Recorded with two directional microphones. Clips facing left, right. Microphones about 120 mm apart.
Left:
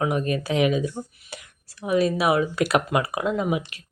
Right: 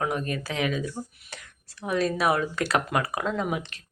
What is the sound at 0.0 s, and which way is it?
Speech, 15° left (ahead or behind).